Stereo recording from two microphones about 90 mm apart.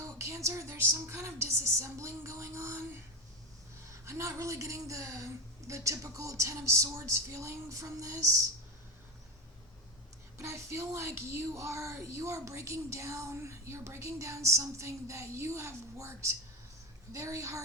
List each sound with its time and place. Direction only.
0.0 s speech: 30° right (ahead or behind)
4.0 s speech: 35° right (ahead or behind)
10.3 s speech: 30° right (ahead or behind)